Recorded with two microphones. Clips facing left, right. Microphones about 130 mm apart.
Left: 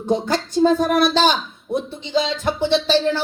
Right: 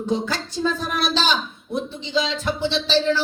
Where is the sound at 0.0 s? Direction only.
50° left (ahead or behind).